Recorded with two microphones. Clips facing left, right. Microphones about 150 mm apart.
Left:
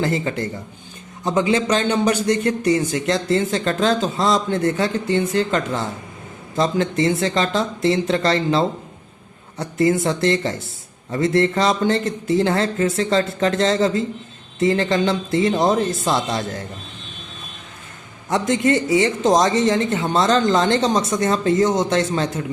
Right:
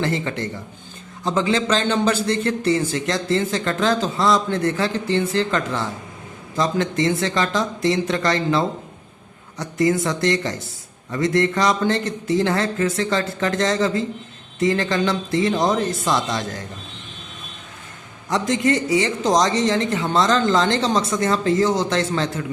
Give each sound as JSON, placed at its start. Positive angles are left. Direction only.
{"t": 0.0, "sound": "a man's voice", "side_deg": 25}
{"t": 18.3, "sound": "a man's voice", "side_deg": 20}